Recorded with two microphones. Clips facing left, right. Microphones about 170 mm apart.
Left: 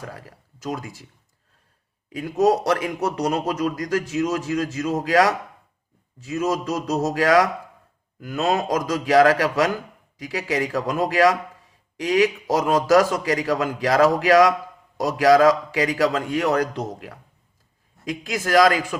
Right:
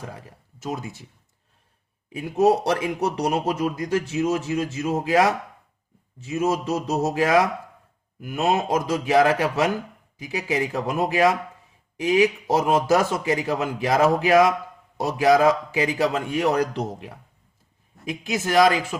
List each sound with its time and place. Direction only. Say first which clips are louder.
0.1 s a man's voice: left 1 dB; 25° right (ahead or behind)
2.0 s a man's voice: even; 25° right (ahead or behind)
18.1 s a man's voice: left 2 dB; 25° right (ahead or behind)